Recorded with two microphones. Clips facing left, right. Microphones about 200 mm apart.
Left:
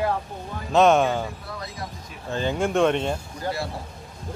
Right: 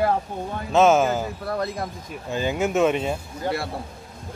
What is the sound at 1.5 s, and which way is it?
Speech, 55° right (ahead or behind).